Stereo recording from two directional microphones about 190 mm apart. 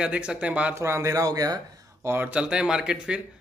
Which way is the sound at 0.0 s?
5° right (ahead or behind).